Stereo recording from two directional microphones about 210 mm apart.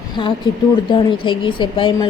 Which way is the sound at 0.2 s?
25° left (ahead or behind).